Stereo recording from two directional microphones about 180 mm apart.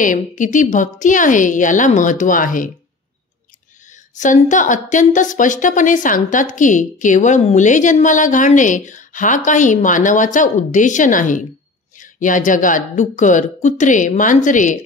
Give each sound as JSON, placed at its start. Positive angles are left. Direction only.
{"t": 0.0, "sound": "a woman's voice", "side_deg": 45}
{"t": 4.1, "sound": "a woman's voice", "side_deg": 45}